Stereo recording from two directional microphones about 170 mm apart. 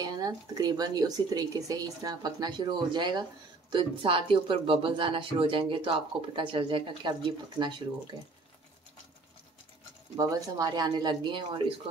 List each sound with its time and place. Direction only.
0.0 s speech: 25° right (ahead or behind)
10.1 s speech: 20° right (ahead or behind)